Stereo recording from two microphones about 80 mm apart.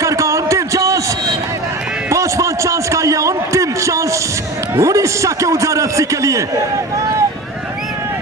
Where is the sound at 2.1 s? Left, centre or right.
Right.